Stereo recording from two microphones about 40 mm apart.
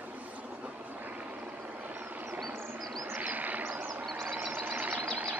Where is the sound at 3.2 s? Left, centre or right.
Right.